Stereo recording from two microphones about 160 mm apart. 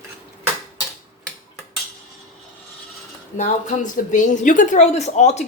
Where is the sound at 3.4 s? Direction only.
50° left (ahead or behind).